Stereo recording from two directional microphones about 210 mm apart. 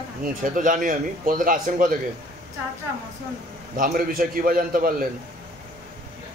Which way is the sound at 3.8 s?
45° right (ahead or behind).